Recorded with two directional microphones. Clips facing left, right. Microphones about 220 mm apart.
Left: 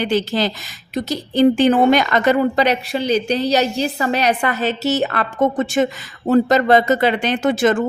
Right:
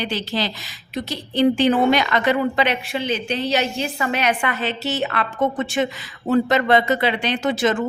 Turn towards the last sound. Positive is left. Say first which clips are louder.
# left 4 dB
turn(degrees=50)  # may be behind; listen again after turning